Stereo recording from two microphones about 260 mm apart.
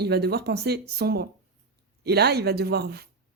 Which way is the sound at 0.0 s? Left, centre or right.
Right.